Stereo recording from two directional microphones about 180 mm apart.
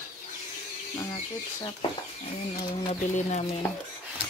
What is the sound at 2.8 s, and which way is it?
Speech, 35° left (ahead or behind).